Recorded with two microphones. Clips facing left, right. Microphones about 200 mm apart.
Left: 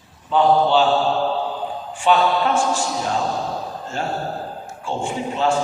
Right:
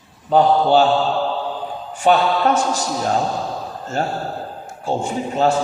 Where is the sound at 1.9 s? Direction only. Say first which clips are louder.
Right 2 dB; 40° right (ahead or behind).